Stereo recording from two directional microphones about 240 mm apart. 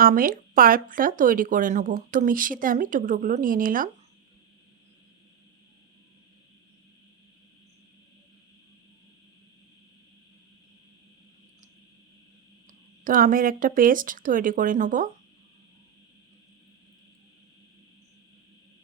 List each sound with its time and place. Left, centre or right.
0.0 s speech: right
12.6 s speech: right